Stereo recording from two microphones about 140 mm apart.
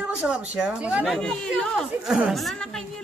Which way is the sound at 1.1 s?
5° left (ahead or behind).